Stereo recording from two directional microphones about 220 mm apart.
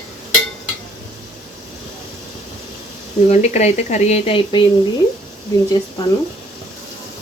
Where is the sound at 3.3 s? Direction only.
30° left (ahead or behind).